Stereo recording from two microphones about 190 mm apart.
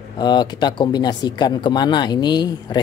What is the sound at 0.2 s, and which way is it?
Speech, 20° left (ahead or behind).